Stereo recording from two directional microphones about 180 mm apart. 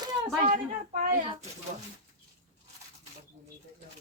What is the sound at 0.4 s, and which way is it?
Speech, 45° right (ahead or behind).